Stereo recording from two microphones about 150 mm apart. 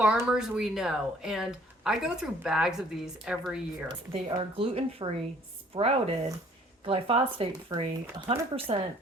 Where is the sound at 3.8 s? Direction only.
40° right (ahead or behind).